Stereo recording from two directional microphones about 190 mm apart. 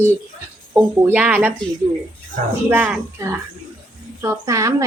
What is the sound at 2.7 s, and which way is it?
A woman's voice, 10° right (ahead or behind).